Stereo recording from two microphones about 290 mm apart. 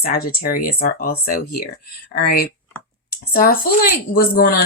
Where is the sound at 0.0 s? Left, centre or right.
Left.